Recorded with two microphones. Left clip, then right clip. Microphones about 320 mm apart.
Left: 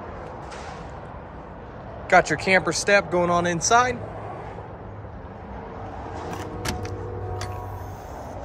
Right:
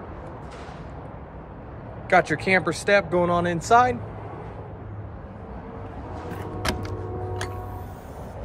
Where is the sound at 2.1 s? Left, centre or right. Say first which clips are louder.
Left 2 dB; centre.